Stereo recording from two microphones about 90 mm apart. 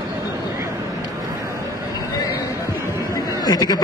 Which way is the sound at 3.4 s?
50° left (ahead or behind).